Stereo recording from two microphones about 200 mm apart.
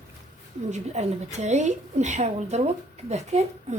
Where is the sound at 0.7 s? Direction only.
35° right (ahead or behind).